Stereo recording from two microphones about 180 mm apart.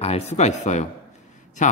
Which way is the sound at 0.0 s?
35° left (ahead or behind).